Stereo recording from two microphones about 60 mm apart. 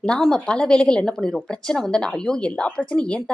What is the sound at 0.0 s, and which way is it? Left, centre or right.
Speech, centre.